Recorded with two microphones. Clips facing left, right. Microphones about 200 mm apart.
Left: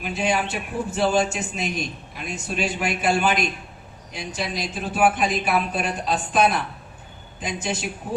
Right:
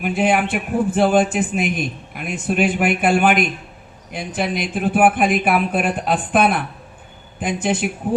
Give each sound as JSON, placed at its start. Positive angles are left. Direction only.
{"t": 0.0, "sound": "a man's voice", "side_deg": -55}